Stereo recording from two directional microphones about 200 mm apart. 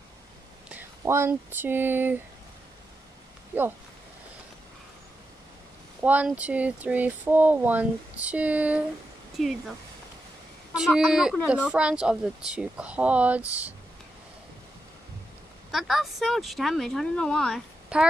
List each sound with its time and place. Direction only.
0.7 s speech: 10° right (ahead or behind)
3.5 s speech: 10° right (ahead or behind)
6.0 s speech: 5° right (ahead or behind)
11.0 s speech: centre (ahead or behind)
15.7 s speech: centre (ahead or behind)